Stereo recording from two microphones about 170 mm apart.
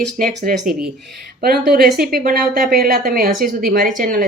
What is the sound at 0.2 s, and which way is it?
A woman's voice, 55° right (ahead or behind).